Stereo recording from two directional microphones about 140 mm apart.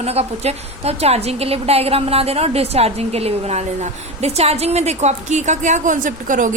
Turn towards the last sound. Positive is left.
turn(degrees=-65)  # may be behind; listen again after turning